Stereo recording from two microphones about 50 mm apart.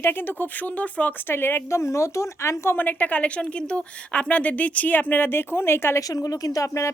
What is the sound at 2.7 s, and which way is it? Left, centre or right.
Speech, left.